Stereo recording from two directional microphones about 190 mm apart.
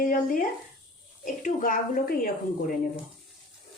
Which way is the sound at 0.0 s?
45° left (ahead or behind).